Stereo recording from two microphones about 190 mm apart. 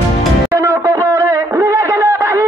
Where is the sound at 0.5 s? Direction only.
15° right (ahead or behind).